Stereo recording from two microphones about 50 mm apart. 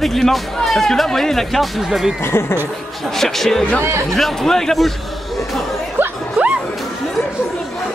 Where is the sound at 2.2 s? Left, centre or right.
Left.